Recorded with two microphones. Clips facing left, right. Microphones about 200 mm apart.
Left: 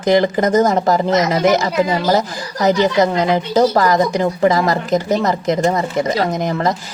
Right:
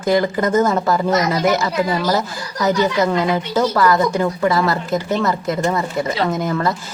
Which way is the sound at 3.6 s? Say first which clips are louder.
Left 4 dB; 40° left (ahead or behind).